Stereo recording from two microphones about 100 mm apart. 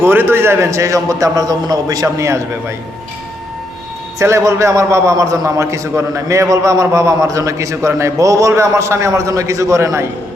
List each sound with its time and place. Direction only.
0.0 s a man's voice: 20° right (ahead or behind)
4.2 s a man's voice: 30° right (ahead or behind)